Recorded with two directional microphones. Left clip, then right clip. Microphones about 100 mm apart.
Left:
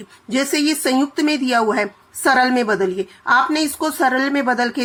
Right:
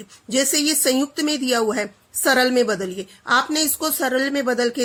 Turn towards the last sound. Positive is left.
turn(degrees=-30)  # may be behind; listen again after turning